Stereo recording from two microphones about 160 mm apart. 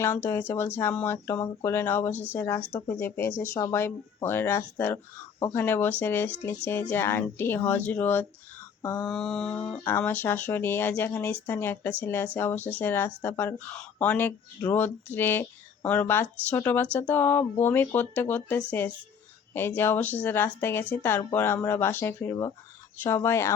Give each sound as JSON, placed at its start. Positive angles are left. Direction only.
{"t": 0.0, "sound": "a woman's voice", "side_deg": 15}
{"t": 8.8, "sound": "mantra", "side_deg": 20}
{"t": 9.0, "sound": "mantra", "side_deg": 5}
{"t": 9.6, "sound": "a woman's voice", "side_deg": 15}